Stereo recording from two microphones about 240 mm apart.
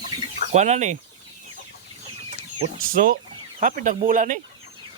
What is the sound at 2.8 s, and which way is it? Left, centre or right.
Speech, right.